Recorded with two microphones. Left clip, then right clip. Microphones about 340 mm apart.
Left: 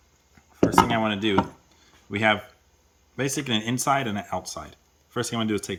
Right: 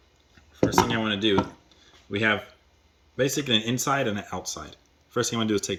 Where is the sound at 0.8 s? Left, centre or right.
Centre.